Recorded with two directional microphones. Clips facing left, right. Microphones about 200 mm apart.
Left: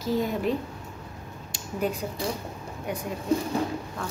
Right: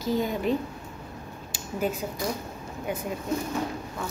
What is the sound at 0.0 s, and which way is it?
Speech, centre (ahead or behind).